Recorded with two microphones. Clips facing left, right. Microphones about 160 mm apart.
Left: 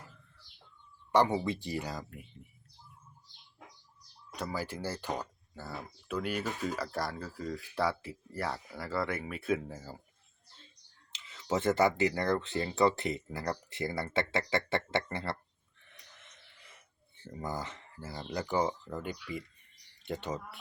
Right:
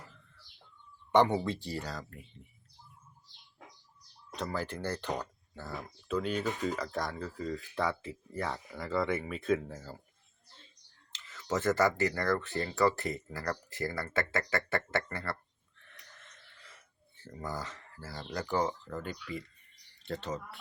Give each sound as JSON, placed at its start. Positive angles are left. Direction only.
{"t": 1.1, "sound": "speech", "side_deg": 5}
{"t": 4.4, "sound": "speech", "side_deg": 10}
{"t": 11.3, "sound": "speech", "side_deg": 15}
{"t": 15.8, "sound": "a sound", "side_deg": 15}
{"t": 17.2, "sound": "speech", "side_deg": 15}